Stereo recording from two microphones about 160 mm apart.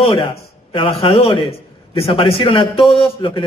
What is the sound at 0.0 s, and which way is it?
A man's voice, 35° left (ahead or behind).